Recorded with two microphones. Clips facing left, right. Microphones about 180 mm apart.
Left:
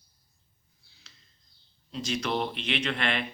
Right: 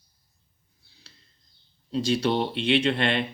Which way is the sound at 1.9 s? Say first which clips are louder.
Right 7 dB; 30° right (ahead or behind).